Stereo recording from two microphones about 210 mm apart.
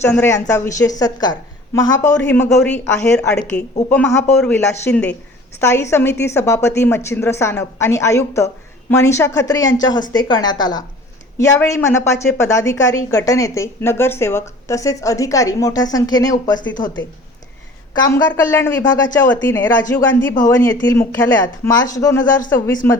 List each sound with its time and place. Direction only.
0.0 s a woman's voice: 10° left (ahead or behind)